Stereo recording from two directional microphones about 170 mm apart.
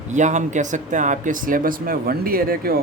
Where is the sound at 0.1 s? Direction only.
45° right (ahead or behind).